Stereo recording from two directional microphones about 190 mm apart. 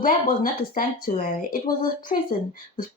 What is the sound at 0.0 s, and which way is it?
Speech, 45° left (ahead or behind).